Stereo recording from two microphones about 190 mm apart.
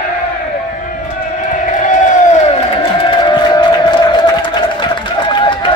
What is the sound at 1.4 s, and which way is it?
Crowd, 40° left (ahead or behind).